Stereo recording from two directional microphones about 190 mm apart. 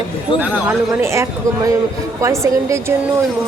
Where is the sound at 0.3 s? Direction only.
10° right (ahead or behind).